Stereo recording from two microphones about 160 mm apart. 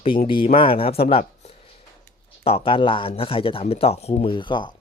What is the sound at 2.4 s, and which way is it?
Speech, 35° left (ahead or behind).